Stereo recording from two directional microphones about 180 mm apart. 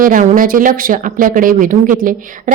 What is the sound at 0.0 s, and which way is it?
A woman's voice, 45° right (ahead or behind).